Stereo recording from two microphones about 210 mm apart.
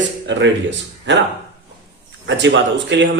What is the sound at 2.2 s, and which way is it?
Speech, 60° right (ahead or behind).